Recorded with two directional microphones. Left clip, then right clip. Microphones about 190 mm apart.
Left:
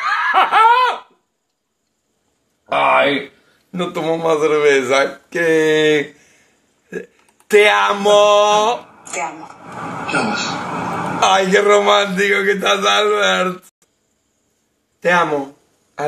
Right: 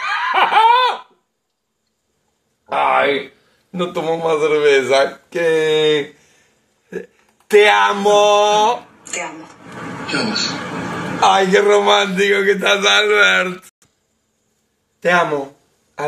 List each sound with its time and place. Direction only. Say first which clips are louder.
0.0 s laughter: left 1 dB; 10° left (ahead or behind)
2.6 s a sound: left 2 dB; 30° left (ahead or behind)
3.7 s a man's voice: even; 10° left (ahead or behind)
9.8 s a sound: left 2 dB; 90° left
11.1 s a man's voice: right 1 dB; 10° left (ahead or behind)
15.0 s speech: even; centre (ahead or behind)